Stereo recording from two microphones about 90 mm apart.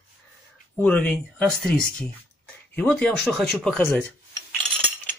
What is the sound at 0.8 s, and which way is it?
Speech, 15° left (ahead or behind).